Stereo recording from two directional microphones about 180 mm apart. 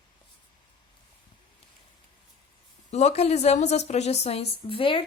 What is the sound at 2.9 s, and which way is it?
Speech, 40° left (ahead or behind).